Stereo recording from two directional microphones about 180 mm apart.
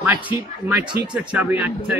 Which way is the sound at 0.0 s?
10° right (ahead or behind).